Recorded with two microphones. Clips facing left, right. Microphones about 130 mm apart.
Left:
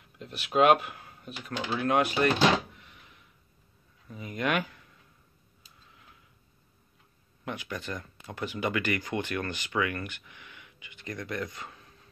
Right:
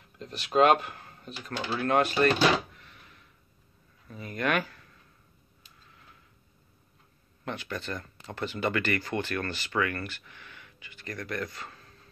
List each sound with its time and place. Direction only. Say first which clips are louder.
0.2 s speech: right 1 dB; 10° left (ahead or behind)
1.8 s drawer open or close: right 1 dB; 10° left (ahead or behind)
4.1 s speech: right 1 dB; 15° left (ahead or behind)
7.4 s speech: right 1 dB; 10° left (ahead or behind)